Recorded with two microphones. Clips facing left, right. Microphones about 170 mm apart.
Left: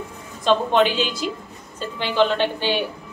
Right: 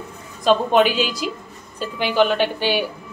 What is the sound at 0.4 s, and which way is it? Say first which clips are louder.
A woman's voice: right 2 dB; 10° right (ahead or behind).